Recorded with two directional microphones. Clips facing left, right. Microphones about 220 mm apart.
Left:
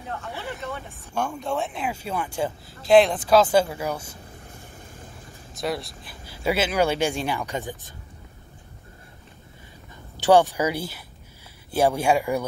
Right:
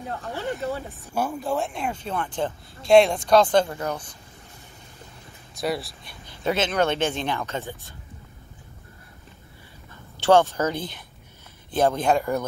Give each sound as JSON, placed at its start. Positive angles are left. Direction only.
{"t": 0.4, "sound": "speech", "side_deg": -45}
{"t": 1.1, "sound": "speech", "side_deg": -5}
{"t": 5.5, "sound": "speech", "side_deg": 0}
{"t": 10.1, "sound": "speech", "side_deg": 15}